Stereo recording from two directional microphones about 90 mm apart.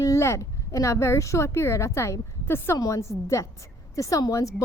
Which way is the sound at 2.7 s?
40° left (ahead or behind).